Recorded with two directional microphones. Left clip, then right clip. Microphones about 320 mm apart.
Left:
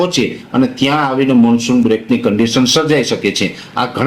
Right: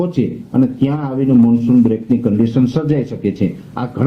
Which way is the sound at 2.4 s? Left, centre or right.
Centre.